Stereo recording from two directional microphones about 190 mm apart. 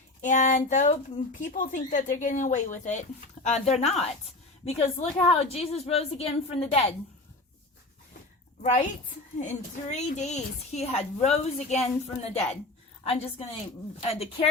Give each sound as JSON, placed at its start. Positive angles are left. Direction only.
{"t": 0.2, "sound": "speech", "side_deg": 40}
{"t": 8.6, "sound": "speech", "side_deg": 35}
{"t": 13.1, "sound": "speech", "side_deg": 30}